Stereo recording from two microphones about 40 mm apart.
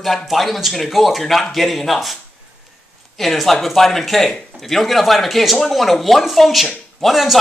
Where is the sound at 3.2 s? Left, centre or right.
Centre.